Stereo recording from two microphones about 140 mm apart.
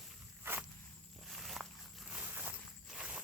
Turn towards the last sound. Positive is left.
turn(degrees=-5)  # may be behind; listen again after turning